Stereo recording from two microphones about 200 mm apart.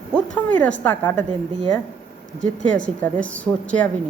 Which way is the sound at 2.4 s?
40° right (ahead or behind).